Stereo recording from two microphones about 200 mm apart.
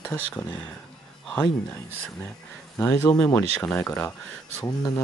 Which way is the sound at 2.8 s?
10° left (ahead or behind).